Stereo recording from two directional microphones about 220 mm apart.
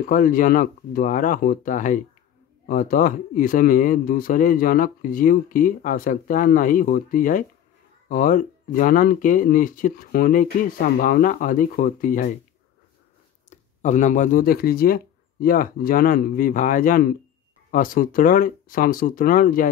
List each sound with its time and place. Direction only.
0.0 s speech: 40° left (ahead or behind)
13.5 s speech: 35° left (ahead or behind)